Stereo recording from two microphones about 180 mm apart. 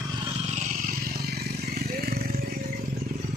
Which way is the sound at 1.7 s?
55° right (ahead or behind).